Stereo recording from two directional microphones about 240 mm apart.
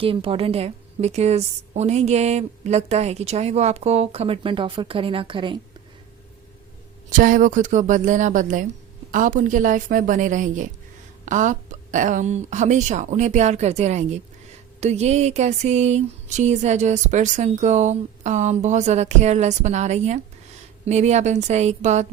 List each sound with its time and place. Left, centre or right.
0.0 s a woman's voice: right
7.1 s a woman's voice: right